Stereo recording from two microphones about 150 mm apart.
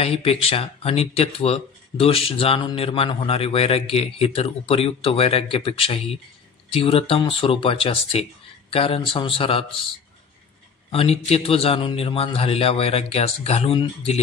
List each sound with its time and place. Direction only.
0.0 s speech: 40° left (ahead or behind)
10.9 s speech: 40° left (ahead or behind)